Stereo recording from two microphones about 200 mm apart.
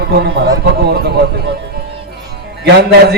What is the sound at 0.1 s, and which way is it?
Speech, 55° right (ahead or behind).